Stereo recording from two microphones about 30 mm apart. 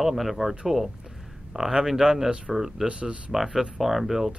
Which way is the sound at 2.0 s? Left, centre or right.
Right.